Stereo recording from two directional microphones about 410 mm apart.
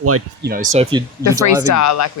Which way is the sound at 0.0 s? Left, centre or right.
Right.